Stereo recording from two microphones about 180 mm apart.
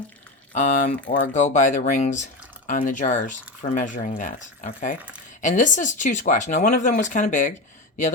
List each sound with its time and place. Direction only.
0.5 s speech: 45° left (ahead or behind)